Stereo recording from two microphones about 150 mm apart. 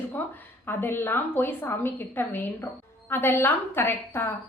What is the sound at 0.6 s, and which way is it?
A woman's voice, 15° left (ahead or behind).